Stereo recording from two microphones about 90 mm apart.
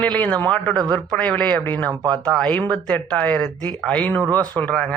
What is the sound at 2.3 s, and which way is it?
Speech, 10° left (ahead or behind).